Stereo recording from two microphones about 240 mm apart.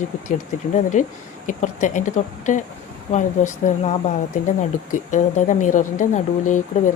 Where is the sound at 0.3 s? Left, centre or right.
Left.